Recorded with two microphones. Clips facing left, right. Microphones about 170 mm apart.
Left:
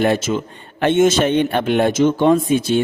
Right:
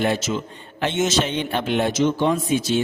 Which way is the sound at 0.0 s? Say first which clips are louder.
Left 5 dB; 50° left (ahead or behind).